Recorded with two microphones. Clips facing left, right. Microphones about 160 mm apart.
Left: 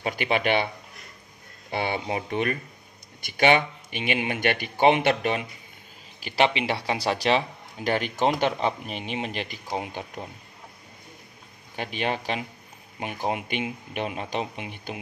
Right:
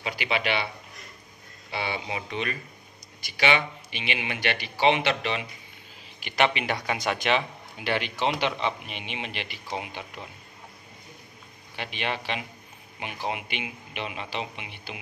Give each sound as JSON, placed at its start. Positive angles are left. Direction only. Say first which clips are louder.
{"t": 0.0, "sound": "speech", "louder": "left 4 dB", "side_deg": 50}
{"t": 1.7, "sound": "speech", "louder": "left 4 dB", "side_deg": 50}
{"t": 6.2, "sound": "speech", "louder": "left 2 dB", "side_deg": 30}
{"t": 11.7, "sound": "speech", "louder": "left 4 dB", "side_deg": 40}